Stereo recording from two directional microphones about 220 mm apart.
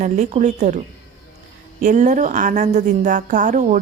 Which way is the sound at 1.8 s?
35° right (ahead or behind).